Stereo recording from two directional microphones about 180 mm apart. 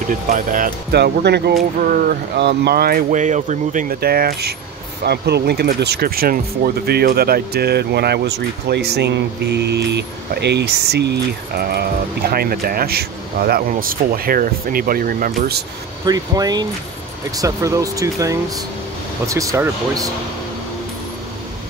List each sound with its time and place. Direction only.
0.1 s speech: 50° right (ahead or behind)
0.9 s speech: 65° right (ahead or behind)
16.1 s speech: 20° right (ahead or behind)